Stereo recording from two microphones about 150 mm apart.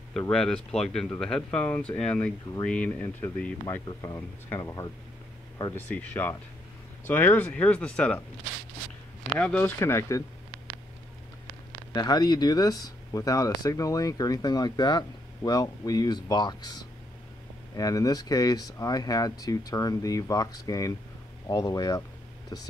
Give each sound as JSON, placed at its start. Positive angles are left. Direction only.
{"t": 0.3, "sound": "speech", "side_deg": 5}
{"t": 4.0, "sound": "speech", "side_deg": 20}
{"t": 9.3, "sound": "speech", "side_deg": 10}
{"t": 11.9, "sound": "speech", "side_deg": 25}